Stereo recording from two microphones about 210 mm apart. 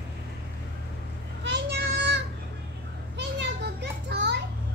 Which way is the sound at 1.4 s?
55° right (ahead or behind).